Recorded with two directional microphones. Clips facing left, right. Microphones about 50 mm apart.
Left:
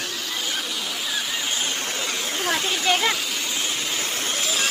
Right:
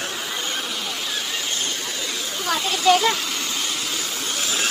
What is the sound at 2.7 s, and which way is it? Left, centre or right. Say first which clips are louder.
Speech: right 7 dB; centre.